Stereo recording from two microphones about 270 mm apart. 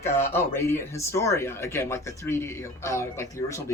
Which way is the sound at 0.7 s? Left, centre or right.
Centre.